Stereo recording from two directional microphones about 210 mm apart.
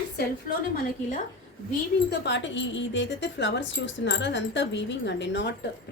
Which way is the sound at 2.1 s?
55° left (ahead or behind).